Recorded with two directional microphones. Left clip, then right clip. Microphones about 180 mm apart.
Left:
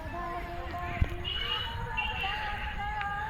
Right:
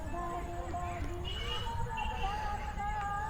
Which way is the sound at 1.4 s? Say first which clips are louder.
Left 7 dB; 20° left (ahead or behind).